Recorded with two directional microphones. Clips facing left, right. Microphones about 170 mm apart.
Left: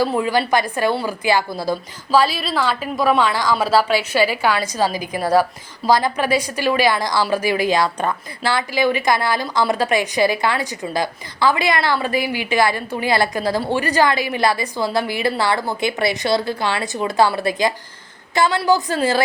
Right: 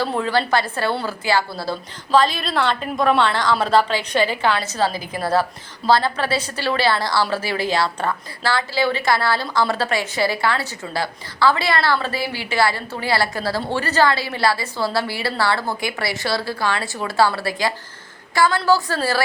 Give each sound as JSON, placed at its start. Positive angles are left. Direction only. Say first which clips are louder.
{"t": 0.0, "sound": "a woman's voice", "louder": "left 2 dB", "side_deg": 10}
{"t": 2.1, "sound": "a woman's voice", "louder": "even", "side_deg": 5}